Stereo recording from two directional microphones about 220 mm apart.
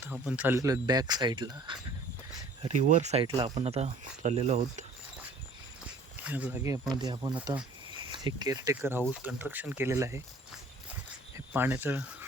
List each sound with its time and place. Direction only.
0.0 s speech: 5° right (ahead or behind); by 4.9 s 30° right (ahead or behind)
6.2 s speech: 5° right (ahead or behind)
7.3 s speech: 5° right (ahead or behind)
8.1 s speech: 20° right (ahead or behind)
11.3 s speech: 10° right (ahead or behind)